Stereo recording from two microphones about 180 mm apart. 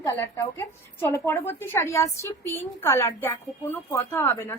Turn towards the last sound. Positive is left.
turn(degrees=15)  # may be behind; listen again after turning